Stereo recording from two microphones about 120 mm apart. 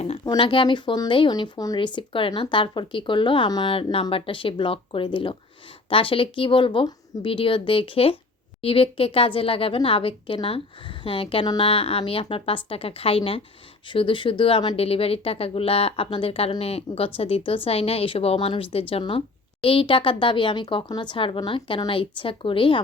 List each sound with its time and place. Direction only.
0.3 s a woman's voice: 45° left (ahead or behind)
1.3 s a woman's voice: 30° left (ahead or behind)
14.8 s a woman's voice: 55° left (ahead or behind)